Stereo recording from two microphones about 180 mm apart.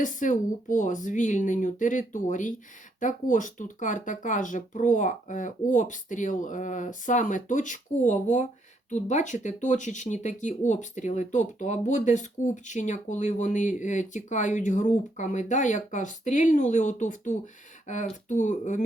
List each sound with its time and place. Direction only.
0.0 s speech: 45° left (ahead or behind)